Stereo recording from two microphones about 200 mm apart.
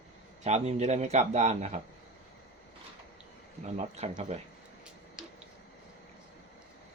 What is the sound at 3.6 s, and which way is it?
Speech, 35° right (ahead or behind).